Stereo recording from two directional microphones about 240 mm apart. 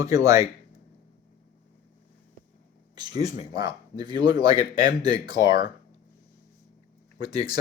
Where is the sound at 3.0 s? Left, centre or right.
Centre.